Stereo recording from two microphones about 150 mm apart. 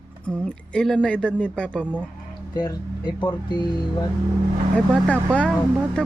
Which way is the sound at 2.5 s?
25° left (ahead or behind).